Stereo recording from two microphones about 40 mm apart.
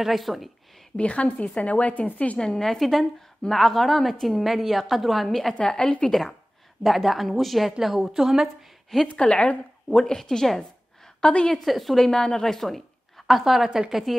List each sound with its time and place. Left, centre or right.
0.0 s a woman's voice: centre
0.9 s speech: left
2.3 s a woman's voice: centre
5.7 s a woman's voice: left
6.0 s a woman's voice: centre
9.1 s a woman's voice: left
9.8 s speech: centre
11.1 s a woman's voice: left
11.5 s a woman's voice: centre
12.1 s a woman's voice: centre
13.7 s a woman's voice: centre